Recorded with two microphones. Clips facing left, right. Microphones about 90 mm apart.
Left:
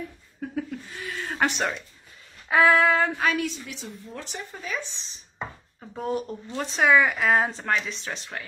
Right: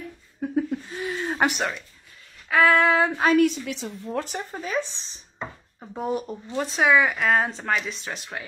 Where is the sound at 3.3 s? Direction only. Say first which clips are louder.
Right 10 dB; 65° right (ahead or behind); by 5.2 s 40° right (ahead or behind).